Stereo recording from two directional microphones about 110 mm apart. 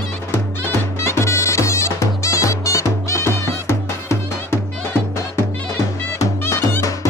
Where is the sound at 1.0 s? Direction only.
25° left (ahead or behind).